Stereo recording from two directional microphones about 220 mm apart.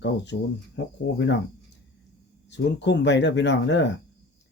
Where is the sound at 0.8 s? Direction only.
55° left (ahead or behind).